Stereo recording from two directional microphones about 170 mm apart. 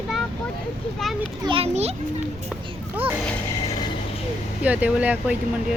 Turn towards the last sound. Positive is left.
turn(degrees=-10)  # may be behind; listen again after turning